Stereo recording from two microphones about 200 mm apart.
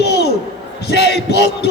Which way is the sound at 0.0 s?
55° left (ahead or behind).